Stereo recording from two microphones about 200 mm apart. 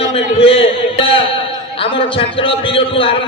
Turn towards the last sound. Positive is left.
turn(degrees=25)  # may be behind; listen again after turning